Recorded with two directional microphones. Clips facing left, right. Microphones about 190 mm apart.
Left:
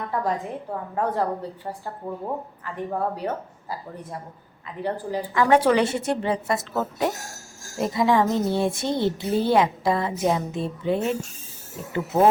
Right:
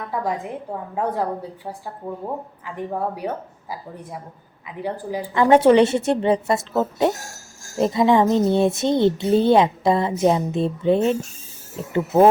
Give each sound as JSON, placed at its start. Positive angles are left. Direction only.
{"t": 0.9, "sound": "speech", "side_deg": -10}
{"t": 5.3, "sound": "a woman's voice", "side_deg": -25}